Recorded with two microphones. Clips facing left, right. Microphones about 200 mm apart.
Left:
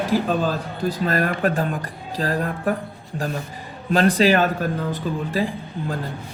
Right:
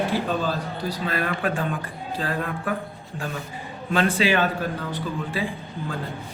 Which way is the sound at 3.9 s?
40° left (ahead or behind).